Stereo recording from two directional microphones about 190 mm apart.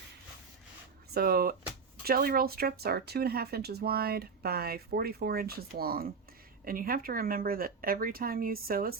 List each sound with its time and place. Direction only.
1.1 s speech: 55° right (ahead or behind)